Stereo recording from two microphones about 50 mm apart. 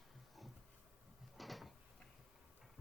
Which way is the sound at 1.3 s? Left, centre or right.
Centre.